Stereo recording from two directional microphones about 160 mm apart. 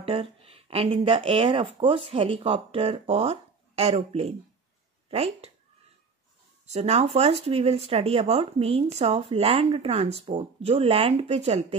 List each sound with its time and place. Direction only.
0.0 s speech: 40° right (ahead or behind)
6.6 s speech: 40° right (ahead or behind)